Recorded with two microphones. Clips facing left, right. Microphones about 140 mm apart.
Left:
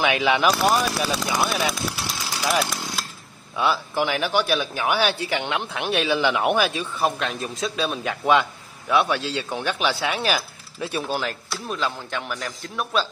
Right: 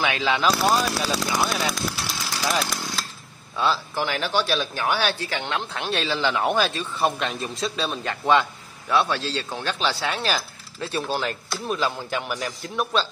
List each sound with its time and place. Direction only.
0.0 s a man's voice: 15° left (ahead or behind)
0.6 s a man's voice: centre (ahead or behind)
3.5 s a man's voice: 15° left (ahead or behind)
7.0 s a man's voice: centre (ahead or behind)
11.7 s a man's voice: 5° right (ahead or behind)